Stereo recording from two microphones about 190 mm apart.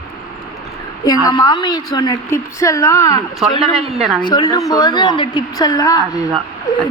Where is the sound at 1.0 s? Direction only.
20° left (ahead or behind).